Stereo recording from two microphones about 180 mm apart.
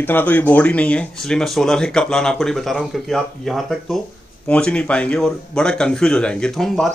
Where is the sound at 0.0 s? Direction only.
10° left (ahead or behind).